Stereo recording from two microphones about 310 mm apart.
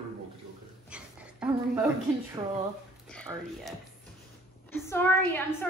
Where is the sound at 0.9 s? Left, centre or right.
Centre.